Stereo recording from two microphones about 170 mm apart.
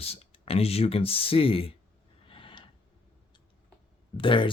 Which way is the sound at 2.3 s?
30° left (ahead or behind).